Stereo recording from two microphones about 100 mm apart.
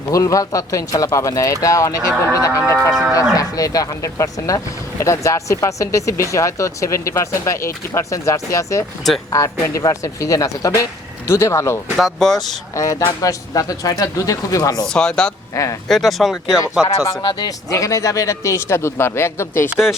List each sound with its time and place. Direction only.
0.1 s a man's voice: 35° left (ahead or behind)
11.9 s speech: centre (ahead or behind)
12.7 s speech: 35° left (ahead or behind)
14.8 s speech: 5° left (ahead or behind)
15.5 s speech: 30° left (ahead or behind)
15.9 s speech: centre (ahead or behind)
17.2 s speech: 50° left (ahead or behind)
17.7 s a man's voice: 35° left (ahead or behind)
19.7 s speech: 5° right (ahead or behind)